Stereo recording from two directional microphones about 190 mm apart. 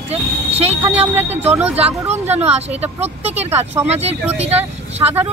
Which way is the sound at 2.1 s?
35° right (ahead or behind).